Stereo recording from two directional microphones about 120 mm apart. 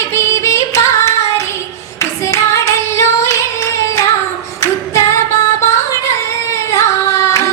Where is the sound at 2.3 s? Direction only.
25° left (ahead or behind).